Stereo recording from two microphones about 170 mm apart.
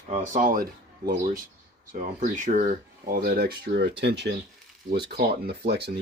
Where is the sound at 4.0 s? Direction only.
85° right.